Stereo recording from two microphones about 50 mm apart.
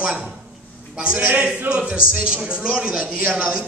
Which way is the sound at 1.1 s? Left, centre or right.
Right.